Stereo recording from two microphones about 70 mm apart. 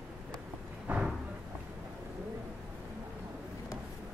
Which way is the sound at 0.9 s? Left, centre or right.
Right.